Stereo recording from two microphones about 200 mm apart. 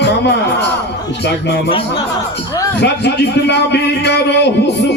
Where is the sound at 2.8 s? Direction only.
60° left (ahead or behind).